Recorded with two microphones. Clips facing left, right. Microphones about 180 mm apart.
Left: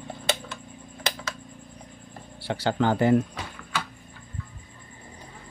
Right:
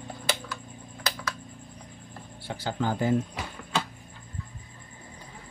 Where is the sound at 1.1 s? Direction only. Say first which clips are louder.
Left 2 dB; 25° left (ahead or behind).